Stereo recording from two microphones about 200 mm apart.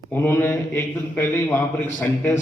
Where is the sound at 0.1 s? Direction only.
10° left (ahead or behind).